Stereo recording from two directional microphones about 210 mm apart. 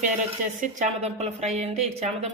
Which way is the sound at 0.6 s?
35° right (ahead or behind).